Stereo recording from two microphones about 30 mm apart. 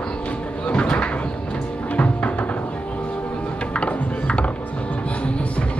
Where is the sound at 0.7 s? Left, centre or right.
Left.